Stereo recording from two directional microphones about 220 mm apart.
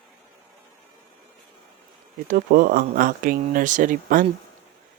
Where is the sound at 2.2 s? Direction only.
40° right (ahead or behind).